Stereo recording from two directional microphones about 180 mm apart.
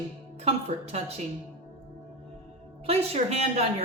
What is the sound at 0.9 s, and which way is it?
Speech, 35° right (ahead or behind).